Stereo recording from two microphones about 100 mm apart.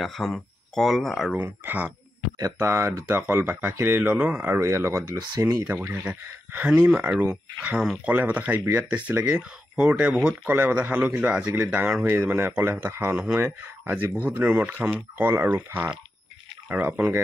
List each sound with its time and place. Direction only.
0.0 s speech: 5° left (ahead or behind)
1.3 s speech: 20° right (ahead or behind)
5.7 s speech: 20° right (ahead or behind)